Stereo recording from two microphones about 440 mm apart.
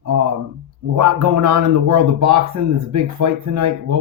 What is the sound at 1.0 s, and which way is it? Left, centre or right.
Speech, right.